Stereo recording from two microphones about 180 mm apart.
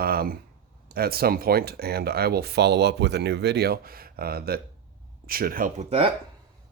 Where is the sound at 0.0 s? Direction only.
55° right (ahead or behind).